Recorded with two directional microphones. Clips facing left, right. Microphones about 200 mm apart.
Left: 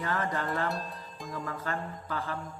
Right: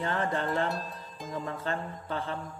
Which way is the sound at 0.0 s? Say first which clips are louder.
Right 2 dB; 30° right (ahead or behind).